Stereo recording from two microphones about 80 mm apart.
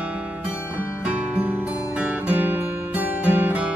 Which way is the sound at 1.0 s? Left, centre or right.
Centre.